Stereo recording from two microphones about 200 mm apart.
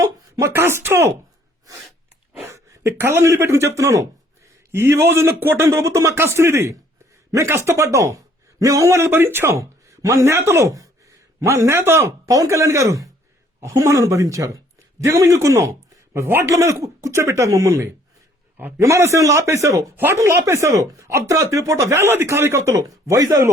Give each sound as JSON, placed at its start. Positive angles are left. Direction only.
{"t": 0.0, "sound": "speech", "side_deg": -15}
{"t": 2.5, "sound": "a man's voice", "side_deg": -10}